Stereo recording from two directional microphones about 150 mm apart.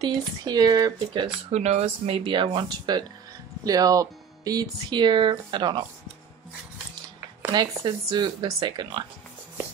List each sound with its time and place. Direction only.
0.0 s speech: 30° right (ahead or behind)
1.5 s speech: 45° right (ahead or behind); by 5.9 s 30° right (ahead or behind)
7.5 s speech: 25° right (ahead or behind)